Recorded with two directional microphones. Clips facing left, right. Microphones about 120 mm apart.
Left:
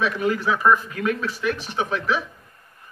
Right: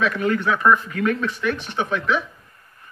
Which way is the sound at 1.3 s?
10° left (ahead or behind).